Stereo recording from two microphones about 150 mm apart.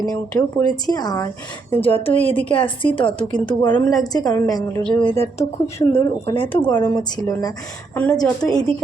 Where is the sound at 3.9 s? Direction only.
25° left (ahead or behind); by 6.9 s 10° left (ahead or behind).